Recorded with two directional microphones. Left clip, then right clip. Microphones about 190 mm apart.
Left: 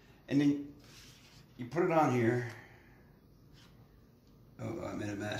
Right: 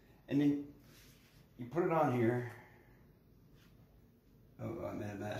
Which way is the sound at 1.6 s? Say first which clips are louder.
Left 4 dB; 20° right (ahead or behind).